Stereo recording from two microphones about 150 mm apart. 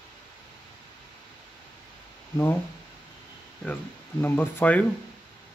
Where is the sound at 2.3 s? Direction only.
15° left (ahead or behind).